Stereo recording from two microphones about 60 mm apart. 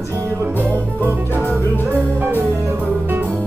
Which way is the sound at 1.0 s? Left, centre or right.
Right.